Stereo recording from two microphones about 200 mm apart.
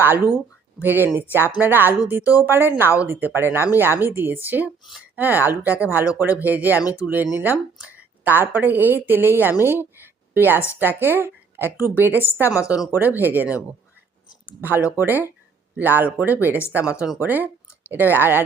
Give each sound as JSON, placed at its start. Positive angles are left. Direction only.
{"t": 0.0, "sound": "a woman's voice", "side_deg": -10}
{"t": 12.5, "sound": "speech", "side_deg": 15}
{"t": 13.1, "sound": "a woman's voice", "side_deg": -10}
{"t": 14.6, "sound": "a woman's voice", "side_deg": -10}